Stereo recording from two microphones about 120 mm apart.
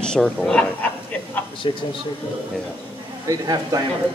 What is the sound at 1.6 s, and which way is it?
Speech, 45° left (ahead or behind).